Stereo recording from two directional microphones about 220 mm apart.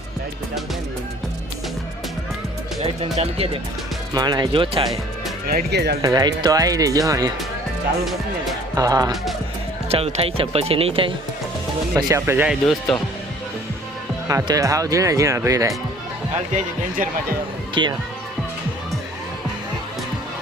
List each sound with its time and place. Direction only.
2.8 s speech: 25° right (ahead or behind)
5.5 s speech: 45° right (ahead or behind)
6.0 s speech: 15° right (ahead or behind)
8.7 s speech: 15° right (ahead or behind)
9.9 s speech: 25° right (ahead or behind)
11.9 s speech: 15° right (ahead or behind)
14.3 s speech: 15° right (ahead or behind)
17.8 s speech: 20° right (ahead or behind)